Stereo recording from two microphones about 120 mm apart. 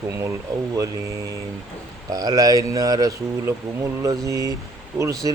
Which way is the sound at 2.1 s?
30° right (ahead or behind).